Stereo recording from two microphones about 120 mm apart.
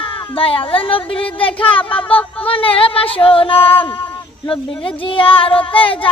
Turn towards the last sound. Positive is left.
turn(degrees=50)  # may be behind; listen again after turning